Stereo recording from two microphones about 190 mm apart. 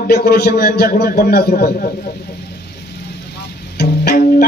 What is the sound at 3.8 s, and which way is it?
Music, 55° left (ahead or behind).